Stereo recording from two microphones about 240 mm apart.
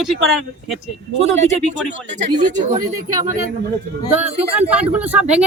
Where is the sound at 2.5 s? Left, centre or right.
Centre.